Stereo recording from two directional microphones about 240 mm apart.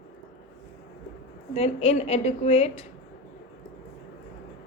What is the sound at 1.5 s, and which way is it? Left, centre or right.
A woman's voice, left.